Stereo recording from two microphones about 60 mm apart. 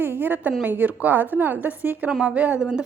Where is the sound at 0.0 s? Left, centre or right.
Right.